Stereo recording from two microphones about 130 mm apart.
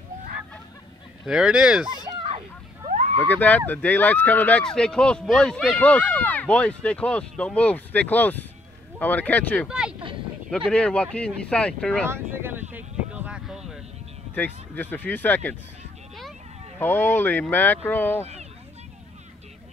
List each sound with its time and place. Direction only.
1.2 s speech: 5° right (ahead or behind)
2.9 s a sound: 60° right (ahead or behind)
3.3 s speech: 10° left (ahead or behind)
9.7 s speech: 5° right (ahead or behind)
10.7 s speech: 10° left (ahead or behind)
12.1 s a sound: 15° right (ahead or behind)
14.3 s speech: 15° left (ahead or behind)
16.7 s speech: 15° left (ahead or behind)
18.2 s a sound: 60° right (ahead or behind)